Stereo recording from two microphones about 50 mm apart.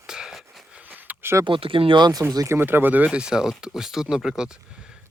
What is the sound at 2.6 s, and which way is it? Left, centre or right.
Speech, right.